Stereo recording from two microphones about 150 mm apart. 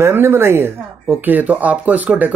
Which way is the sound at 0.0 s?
15° right (ahead or behind).